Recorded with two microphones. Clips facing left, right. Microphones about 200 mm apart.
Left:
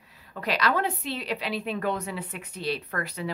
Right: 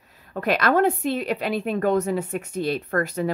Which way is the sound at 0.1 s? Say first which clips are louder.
Right 7 dB; 50° right (ahead or behind).